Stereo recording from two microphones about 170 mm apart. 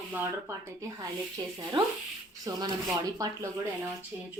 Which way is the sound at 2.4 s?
25° right (ahead or behind).